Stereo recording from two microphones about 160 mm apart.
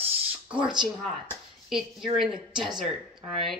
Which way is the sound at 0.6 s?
30° right (ahead or behind).